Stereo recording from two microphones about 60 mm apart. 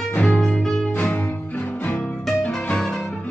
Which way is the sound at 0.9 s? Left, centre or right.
Left.